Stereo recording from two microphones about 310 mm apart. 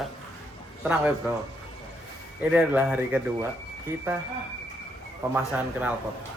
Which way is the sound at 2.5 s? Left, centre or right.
Centre.